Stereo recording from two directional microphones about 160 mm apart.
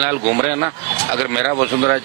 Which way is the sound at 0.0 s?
15° right (ahead or behind).